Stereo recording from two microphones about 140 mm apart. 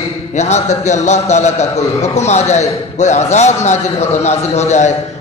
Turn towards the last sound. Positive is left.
turn(degrees=55)  # may be behind; listen again after turning